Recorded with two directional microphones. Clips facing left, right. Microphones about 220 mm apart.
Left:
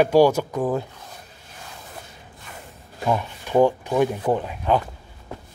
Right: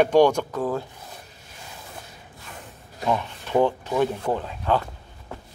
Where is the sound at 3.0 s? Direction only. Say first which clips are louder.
Left 1 dB; 10° left (ahead or behind).